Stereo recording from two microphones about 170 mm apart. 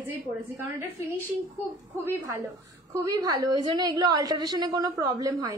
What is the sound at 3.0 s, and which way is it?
A woman's voice, 20° right (ahead or behind).